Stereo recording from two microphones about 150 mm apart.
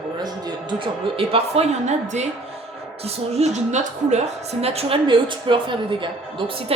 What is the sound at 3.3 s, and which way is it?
A woman's voice, 50° right (ahead or behind).